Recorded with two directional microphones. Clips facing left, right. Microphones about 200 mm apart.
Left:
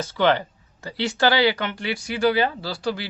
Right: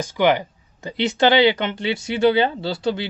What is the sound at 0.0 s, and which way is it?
Speech, 15° right (ahead or behind).